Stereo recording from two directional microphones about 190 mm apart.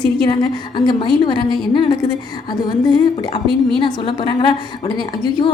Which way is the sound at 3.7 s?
25° left (ahead or behind).